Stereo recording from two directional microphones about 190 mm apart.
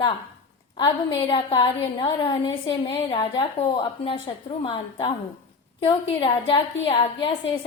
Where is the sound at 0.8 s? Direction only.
25° left (ahead or behind).